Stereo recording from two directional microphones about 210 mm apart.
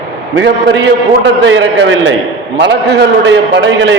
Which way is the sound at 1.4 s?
60° right (ahead or behind).